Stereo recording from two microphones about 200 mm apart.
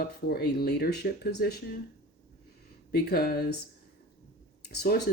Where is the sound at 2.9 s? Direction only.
50° left (ahead or behind).